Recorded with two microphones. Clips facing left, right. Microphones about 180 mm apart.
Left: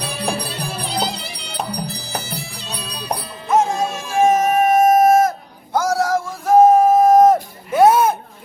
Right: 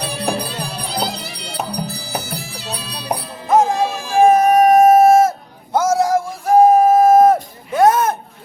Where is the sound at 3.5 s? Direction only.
35° right (ahead or behind).